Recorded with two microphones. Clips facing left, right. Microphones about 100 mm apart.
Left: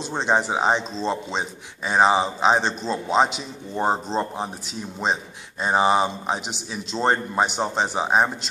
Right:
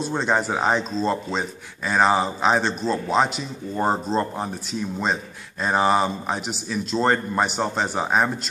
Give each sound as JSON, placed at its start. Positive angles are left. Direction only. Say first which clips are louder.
{"t": 0.1, "sound": "speech", "louder": "left 2 dB", "side_deg": 25}
{"t": 5.6, "sound": "speech", "louder": "even", "side_deg": 20}